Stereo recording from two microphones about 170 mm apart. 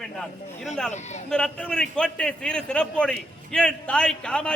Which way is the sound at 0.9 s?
45° left (ahead or behind).